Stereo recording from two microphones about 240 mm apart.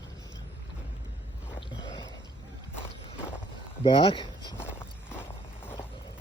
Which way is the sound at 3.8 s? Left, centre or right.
Left.